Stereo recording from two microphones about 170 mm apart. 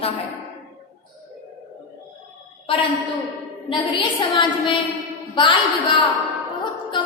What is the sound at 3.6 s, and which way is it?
Speech, 30° left (ahead or behind).